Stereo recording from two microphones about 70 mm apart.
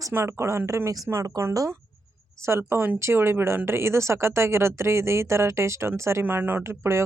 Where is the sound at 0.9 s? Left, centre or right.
Right.